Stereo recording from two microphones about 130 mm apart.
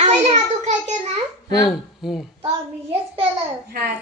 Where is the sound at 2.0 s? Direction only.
5° right (ahead or behind).